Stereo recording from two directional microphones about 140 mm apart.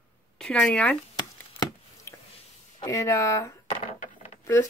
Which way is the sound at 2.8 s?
20° left (ahead or behind).